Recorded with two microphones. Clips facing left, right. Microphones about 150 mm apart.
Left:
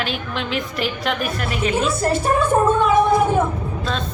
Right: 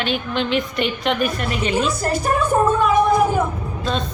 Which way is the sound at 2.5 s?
Centre (ahead or behind).